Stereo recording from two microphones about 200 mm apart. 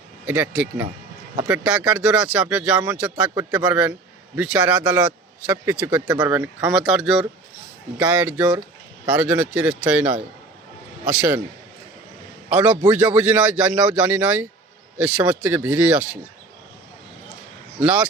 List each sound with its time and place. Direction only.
0.3 s speech: 10° right (ahead or behind)
12.5 s speech: 5° right (ahead or behind)
17.7 s speech: 5° right (ahead or behind)